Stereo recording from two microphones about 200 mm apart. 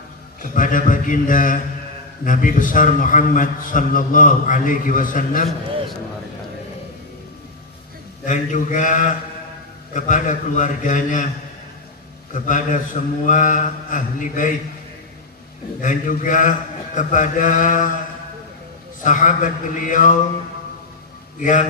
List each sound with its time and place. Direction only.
0.4 s a man's voice: 40° left (ahead or behind)
8.3 s a man's voice: 40° left (ahead or behind)
12.3 s a man's voice: 40° left (ahead or behind)
15.8 s a man's voice: 40° left (ahead or behind)
19.0 s a man's voice: 40° left (ahead or behind)
21.4 s a man's voice: 40° left (ahead or behind)